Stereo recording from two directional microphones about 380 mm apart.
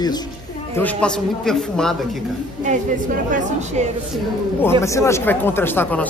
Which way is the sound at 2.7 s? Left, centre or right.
Centre.